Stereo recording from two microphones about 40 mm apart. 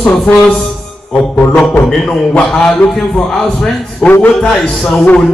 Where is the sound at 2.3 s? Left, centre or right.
Left.